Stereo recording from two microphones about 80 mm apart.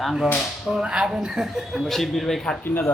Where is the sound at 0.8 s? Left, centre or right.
Centre.